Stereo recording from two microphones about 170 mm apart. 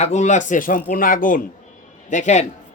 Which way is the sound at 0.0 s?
45° left (ahead or behind).